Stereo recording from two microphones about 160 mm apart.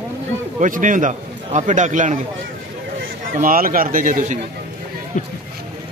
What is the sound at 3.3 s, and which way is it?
A man's voice, 60° right (ahead or behind).